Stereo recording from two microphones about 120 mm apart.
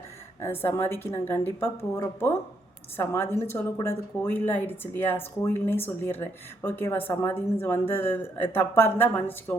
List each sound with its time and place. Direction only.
0.4 s a woman's voice: 20° left (ahead or behind)